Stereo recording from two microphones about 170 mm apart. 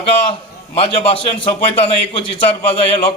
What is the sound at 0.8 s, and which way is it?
A man's voice, 30° left (ahead or behind).